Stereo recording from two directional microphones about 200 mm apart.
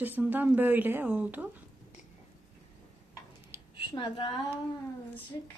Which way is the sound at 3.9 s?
25° left (ahead or behind).